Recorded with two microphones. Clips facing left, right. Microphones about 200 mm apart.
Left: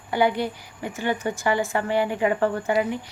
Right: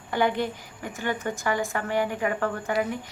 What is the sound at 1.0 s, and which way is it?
A woman's voice, 15° left (ahead or behind).